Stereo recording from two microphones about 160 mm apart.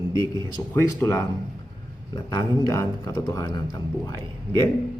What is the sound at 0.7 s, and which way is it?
A man's voice, 10° left (ahead or behind).